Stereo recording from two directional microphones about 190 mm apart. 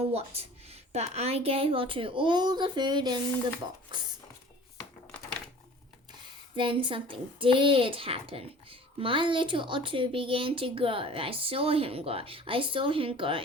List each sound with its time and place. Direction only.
0.0 s a woman's voice: 30° right (ahead or behind)
6.6 s a woman's voice: 25° right (ahead or behind)